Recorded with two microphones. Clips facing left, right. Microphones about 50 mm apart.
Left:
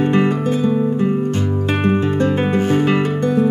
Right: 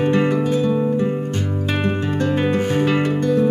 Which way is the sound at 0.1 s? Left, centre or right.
Left.